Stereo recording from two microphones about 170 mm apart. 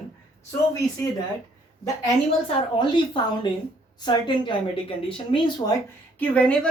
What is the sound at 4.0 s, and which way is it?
A woman's voice, 25° left (ahead or behind).